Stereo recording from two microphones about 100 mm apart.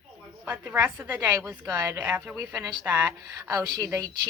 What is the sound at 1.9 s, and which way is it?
Speech, 20° right (ahead or behind).